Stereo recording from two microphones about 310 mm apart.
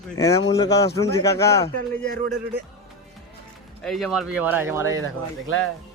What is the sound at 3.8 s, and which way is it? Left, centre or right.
Speech, centre.